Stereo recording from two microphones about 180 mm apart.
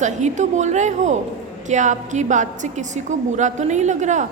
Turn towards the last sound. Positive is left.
turn(degrees=-40)  # may be behind; listen again after turning